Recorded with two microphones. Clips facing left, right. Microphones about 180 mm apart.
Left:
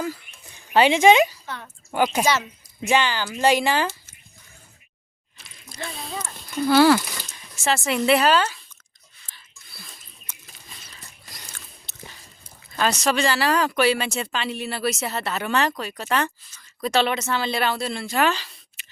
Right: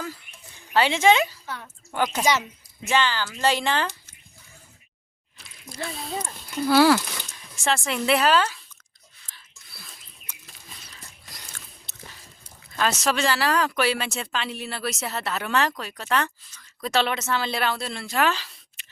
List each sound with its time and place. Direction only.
0.5 s speech: 15° left (ahead or behind)
1.5 s speech: 5° right (ahead or behind)
2.8 s speech: 15° left (ahead or behind)
5.4 s a sound: centre (ahead or behind)
6.2 s speech: 5° right (ahead or behind)
7.0 s a sound: 5° left (ahead or behind)
12.7 s speech: centre (ahead or behind)